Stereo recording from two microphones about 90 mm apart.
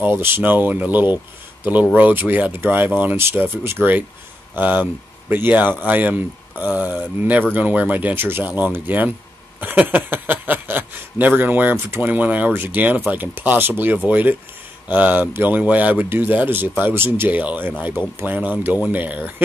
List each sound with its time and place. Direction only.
0.0 s speech: 25° right (ahead or behind)